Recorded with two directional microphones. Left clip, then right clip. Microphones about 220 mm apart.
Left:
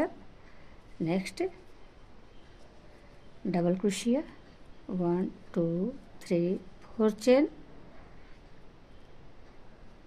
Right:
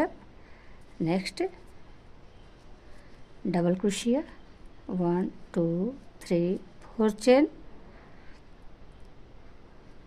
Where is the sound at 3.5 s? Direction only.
20° right (ahead or behind).